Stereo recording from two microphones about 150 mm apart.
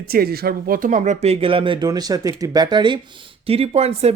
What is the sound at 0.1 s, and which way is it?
Speech, 90° right.